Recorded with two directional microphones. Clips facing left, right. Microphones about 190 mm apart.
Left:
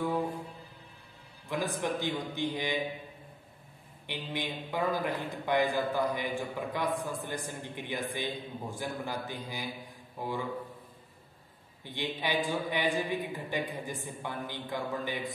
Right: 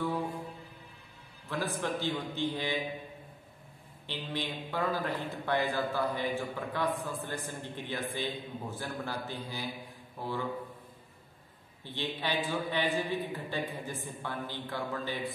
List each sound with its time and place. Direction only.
1.8 s a man's voice: 15° left (ahead or behind)
4.1 s a man's voice: 15° left (ahead or behind)
11.8 s a man's voice: 15° left (ahead or behind)